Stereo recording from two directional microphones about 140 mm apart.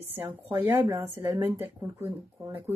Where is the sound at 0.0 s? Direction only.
15° right (ahead or behind).